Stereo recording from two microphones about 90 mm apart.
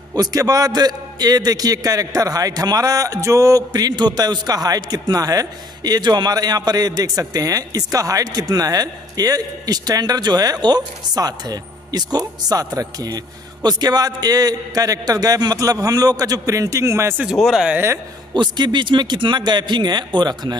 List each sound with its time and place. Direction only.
0.1 s a man's voice: 45° right (ahead or behind)
17.4 s speech: 5° right (ahead or behind)
18.3 s speech: 55° right (ahead or behind)